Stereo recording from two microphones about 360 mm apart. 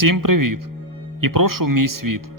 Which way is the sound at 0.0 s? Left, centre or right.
Right.